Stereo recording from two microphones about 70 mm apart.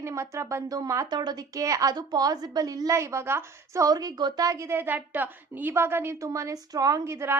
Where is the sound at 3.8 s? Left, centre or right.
Right.